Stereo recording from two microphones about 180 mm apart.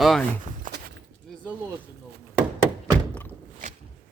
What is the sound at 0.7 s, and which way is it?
Walk, 45° right (ahead or behind).